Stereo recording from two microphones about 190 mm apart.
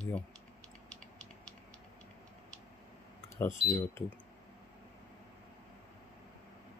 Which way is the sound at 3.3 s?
15° left (ahead or behind).